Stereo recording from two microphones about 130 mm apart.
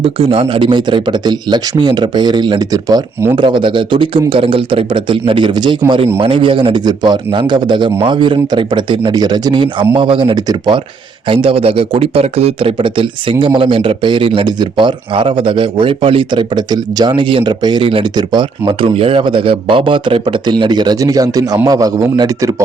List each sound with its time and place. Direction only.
0.0 s a man's voice: 45° right (ahead or behind)
11.3 s a man's voice: 45° right (ahead or behind); by 22.6 s 25° right (ahead or behind)